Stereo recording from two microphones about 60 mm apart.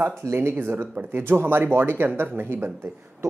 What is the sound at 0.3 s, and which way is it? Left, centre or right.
Speech, right.